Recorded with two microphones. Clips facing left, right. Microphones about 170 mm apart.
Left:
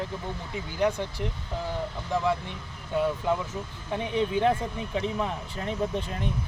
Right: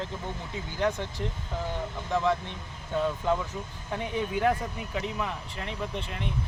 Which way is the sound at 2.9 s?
15° left (ahead or behind).